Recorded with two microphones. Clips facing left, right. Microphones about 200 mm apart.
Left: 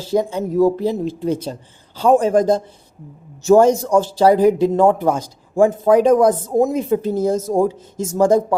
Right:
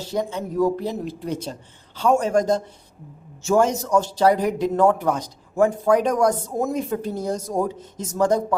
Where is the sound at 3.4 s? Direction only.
35° left (ahead or behind).